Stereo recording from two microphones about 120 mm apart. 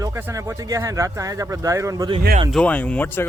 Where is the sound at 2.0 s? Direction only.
40° right (ahead or behind).